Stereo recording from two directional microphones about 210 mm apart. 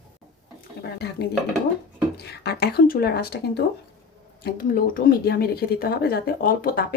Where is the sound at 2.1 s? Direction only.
50° left (ahead or behind).